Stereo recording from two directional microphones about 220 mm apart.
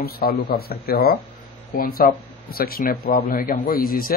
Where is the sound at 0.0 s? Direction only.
45° left (ahead or behind).